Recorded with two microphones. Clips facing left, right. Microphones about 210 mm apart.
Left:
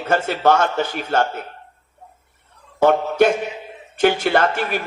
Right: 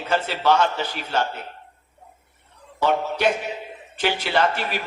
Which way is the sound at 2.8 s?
50° left (ahead or behind).